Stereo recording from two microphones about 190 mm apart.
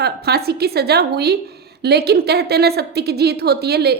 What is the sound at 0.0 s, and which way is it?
A woman's voice, 55° right (ahead or behind).